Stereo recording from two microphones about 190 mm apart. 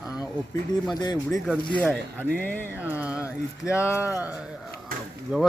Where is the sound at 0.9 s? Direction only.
20° left (ahead or behind).